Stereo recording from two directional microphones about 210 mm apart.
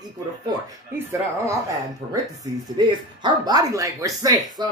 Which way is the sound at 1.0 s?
15° right (ahead or behind).